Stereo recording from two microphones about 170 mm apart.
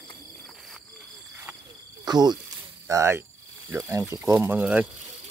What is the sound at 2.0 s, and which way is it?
Speech, 25° right (ahead or behind).